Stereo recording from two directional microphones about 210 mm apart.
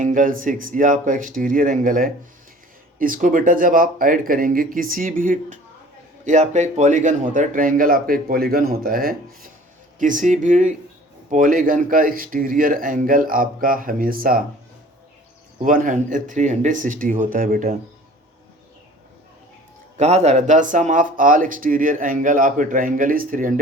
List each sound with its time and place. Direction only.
0.0 s speech: 40° right (ahead or behind)
15.6 s speech: 40° right (ahead or behind)
20.0 s speech: 30° right (ahead or behind)